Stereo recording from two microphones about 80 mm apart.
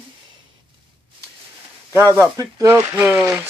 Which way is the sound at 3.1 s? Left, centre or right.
Centre.